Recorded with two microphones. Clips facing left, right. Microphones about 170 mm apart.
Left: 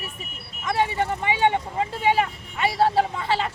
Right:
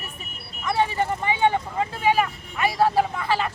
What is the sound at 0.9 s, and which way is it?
Vehicle, 25° left (ahead or behind).